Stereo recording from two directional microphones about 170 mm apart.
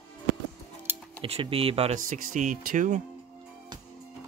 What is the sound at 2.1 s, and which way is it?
Speech, 50° right (ahead or behind).